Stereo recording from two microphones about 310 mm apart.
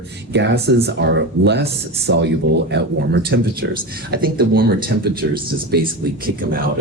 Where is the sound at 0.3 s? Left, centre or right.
Right.